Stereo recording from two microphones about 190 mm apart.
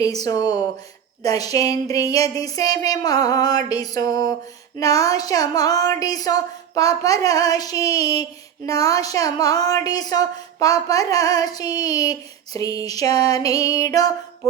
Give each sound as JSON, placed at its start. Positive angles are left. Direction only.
{"t": 0.0, "sound": "a woman's voice", "side_deg": 20}